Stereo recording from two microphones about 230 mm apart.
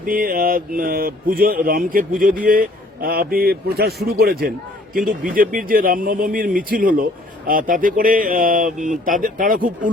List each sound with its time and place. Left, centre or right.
0.0 s a man's voice: right